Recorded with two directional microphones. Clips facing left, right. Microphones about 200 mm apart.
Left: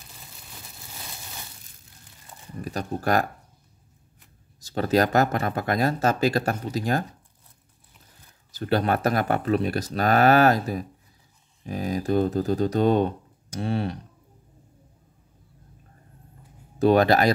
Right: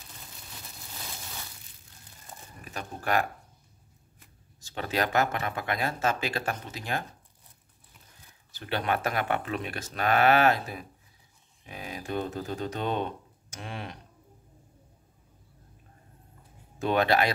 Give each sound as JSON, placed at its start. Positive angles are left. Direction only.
{"t": 2.6, "sound": "speech", "side_deg": 40}
{"t": 4.6, "sound": "speech", "side_deg": 40}
{"t": 8.5, "sound": "speech", "side_deg": 40}
{"t": 16.7, "sound": "speech", "side_deg": 40}